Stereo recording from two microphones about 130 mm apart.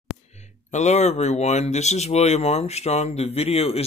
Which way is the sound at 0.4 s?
60° left (ahead or behind).